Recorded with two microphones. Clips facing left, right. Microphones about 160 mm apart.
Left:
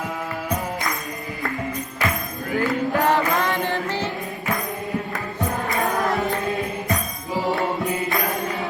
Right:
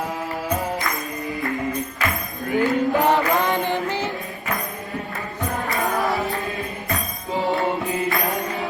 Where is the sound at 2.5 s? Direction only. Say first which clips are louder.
Right 3 dB; 20° right (ahead or behind).